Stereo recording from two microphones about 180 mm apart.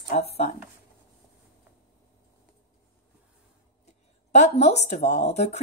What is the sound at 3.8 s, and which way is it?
Speech, 40° left (ahead or behind).